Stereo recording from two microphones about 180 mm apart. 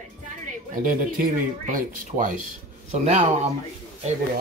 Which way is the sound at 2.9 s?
35° right (ahead or behind).